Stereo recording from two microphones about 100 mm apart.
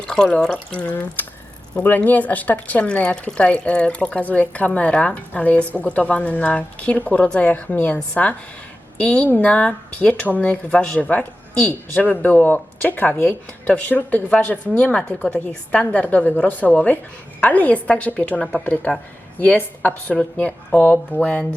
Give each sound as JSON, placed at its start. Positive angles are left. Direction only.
{"t": 0.1, "sound": "speech", "side_deg": 5}